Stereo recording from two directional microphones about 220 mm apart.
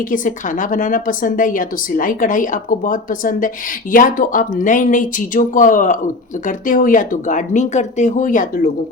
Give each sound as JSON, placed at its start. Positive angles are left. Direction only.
{"t": 0.1, "sound": "a woman's voice", "side_deg": 35}